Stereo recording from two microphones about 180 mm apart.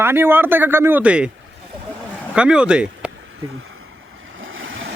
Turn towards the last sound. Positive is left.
turn(degrees=-90)